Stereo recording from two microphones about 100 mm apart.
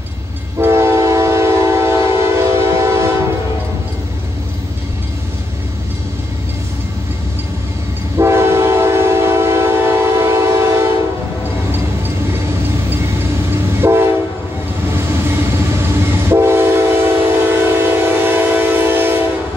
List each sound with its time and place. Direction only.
0.6 s train: 25° right (ahead or behind)
8.2 s train: 25° right (ahead or behind)
13.7 s train: 25° right (ahead or behind)
16.3 s train: 25° right (ahead or behind)